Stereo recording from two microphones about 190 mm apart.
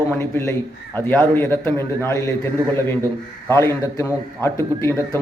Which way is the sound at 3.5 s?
15° left (ahead or behind).